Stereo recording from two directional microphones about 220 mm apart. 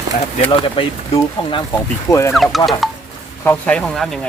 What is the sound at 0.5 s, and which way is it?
Speech, 25° left (ahead or behind).